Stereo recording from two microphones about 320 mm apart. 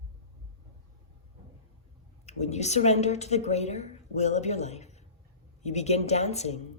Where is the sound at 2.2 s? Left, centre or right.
Left.